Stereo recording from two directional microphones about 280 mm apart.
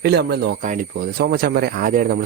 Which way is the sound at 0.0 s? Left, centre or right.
Right.